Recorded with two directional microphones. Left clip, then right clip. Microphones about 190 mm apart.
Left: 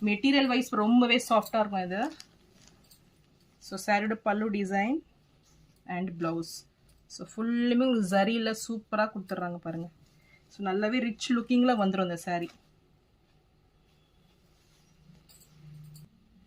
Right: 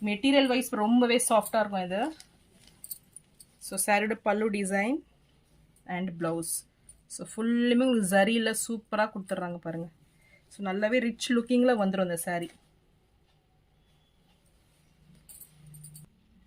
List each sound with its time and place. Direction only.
0.0 s speech: 25° right (ahead or behind)
3.7 s speech: 30° right (ahead or behind)
10.6 s speech: 40° right (ahead or behind)